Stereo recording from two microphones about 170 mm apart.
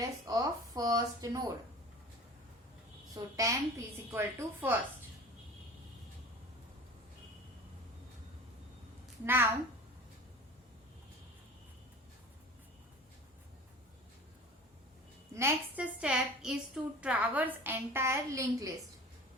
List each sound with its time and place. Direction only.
0.3 s speech: 20° right (ahead or behind)
3.2 s a woman's voice: 20° right (ahead or behind)
9.2 s a woman's voice: 10° right (ahead or behind)
15.3 s a woman's voice: 15° right (ahead or behind)